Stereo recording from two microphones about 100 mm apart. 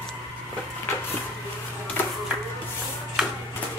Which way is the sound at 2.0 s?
20° left (ahead or behind).